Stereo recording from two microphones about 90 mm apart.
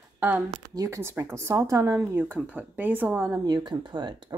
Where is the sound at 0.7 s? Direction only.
45° right (ahead or behind).